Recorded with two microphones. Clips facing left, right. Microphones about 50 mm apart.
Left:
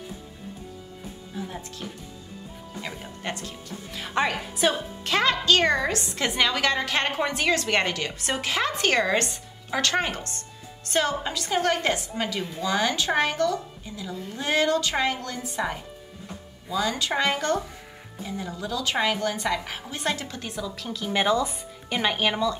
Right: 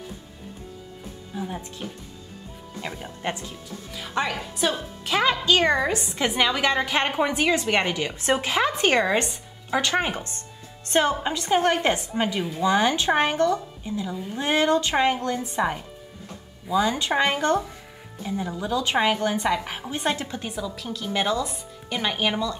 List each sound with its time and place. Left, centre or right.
3.0 s a woman's voice: centre
3.9 s a woman's voice: centre
5.0 s a woman's voice: centre